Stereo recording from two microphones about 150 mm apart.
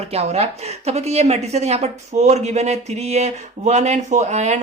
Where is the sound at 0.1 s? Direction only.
45° right (ahead or behind).